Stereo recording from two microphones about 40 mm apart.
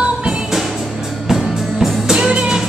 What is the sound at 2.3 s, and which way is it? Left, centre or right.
Music, right.